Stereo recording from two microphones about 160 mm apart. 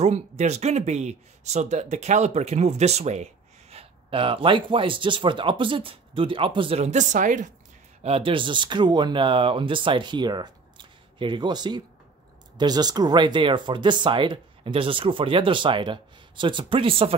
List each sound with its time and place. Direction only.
0.0 s speech: 45° right (ahead or behind)
8.0 s speech: 35° right (ahead or behind)